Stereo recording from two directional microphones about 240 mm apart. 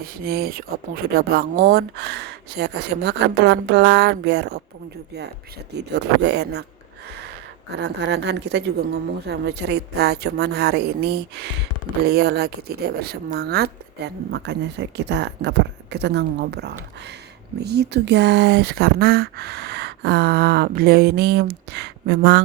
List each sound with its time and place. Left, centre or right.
0.0 s speech: right
5.7 s speech: right
7.8 s speech: right